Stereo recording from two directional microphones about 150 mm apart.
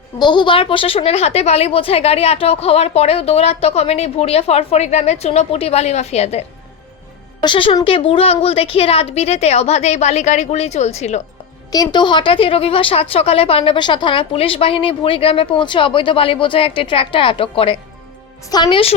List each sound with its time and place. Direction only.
0.2 s a woman's voice: 30° left (ahead or behind)
7.4 s a woman's voice: 35° left (ahead or behind)
11.7 s a woman's voice: 25° left (ahead or behind)